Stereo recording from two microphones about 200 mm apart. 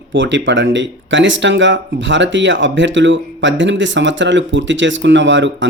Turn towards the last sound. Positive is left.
turn(degrees=-65)  # may be behind; listen again after turning